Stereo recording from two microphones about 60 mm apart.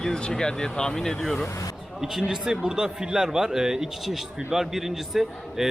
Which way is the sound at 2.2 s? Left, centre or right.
Centre.